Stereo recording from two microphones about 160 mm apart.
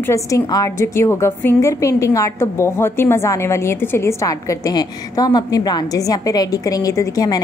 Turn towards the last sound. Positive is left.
turn(degrees=25)  # may be behind; listen again after turning